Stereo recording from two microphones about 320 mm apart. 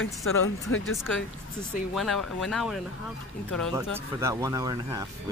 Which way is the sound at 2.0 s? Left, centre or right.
Centre.